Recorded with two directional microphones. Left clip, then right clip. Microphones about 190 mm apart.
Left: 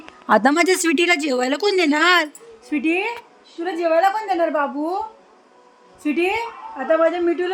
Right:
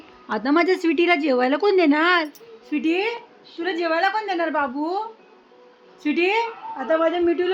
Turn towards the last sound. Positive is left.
turn(degrees=70)  # may be behind; listen again after turning